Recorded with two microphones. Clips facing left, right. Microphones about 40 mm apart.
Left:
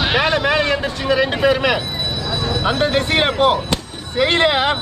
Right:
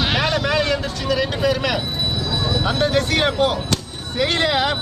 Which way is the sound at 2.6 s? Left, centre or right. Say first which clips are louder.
Left 3 dB; left.